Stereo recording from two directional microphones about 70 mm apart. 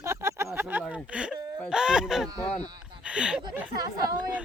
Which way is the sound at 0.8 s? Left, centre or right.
Centre.